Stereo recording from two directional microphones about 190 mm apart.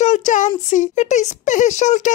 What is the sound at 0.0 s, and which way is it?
Child singing, 40° left (ahead or behind).